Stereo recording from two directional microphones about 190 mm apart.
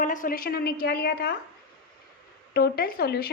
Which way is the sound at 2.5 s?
55° left (ahead or behind).